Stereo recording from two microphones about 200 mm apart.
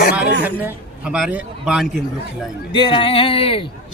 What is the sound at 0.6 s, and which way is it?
Speech, 5° right (ahead or behind).